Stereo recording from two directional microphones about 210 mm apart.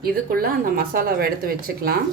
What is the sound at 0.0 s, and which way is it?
Speech, 45° right (ahead or behind).